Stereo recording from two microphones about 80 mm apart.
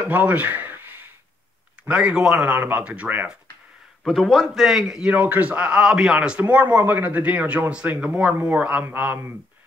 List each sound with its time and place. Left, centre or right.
0.1 s a man's voice: centre
4.0 s a man's voice: centre
5.1 s a man's voice: centre